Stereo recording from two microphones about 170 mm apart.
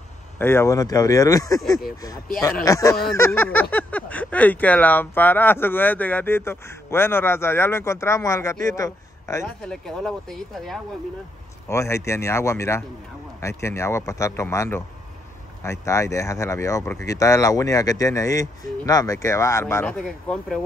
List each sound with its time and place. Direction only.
0.4 s speech: 15° left (ahead or behind)
2.6 s a man's voice: 20° left (ahead or behind)
9.6 s speech: 5° left (ahead or behind)
11.7 s speech: 15° left (ahead or behind); by 20.6 s centre (ahead or behind)